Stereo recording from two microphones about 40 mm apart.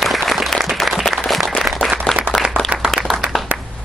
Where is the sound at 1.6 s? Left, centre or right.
Centre.